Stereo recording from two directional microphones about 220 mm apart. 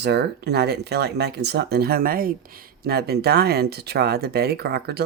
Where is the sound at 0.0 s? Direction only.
50° right (ahead or behind).